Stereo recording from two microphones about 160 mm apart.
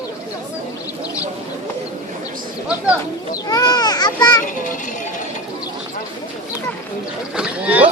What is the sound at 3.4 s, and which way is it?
Speech, 25° left (ahead or behind).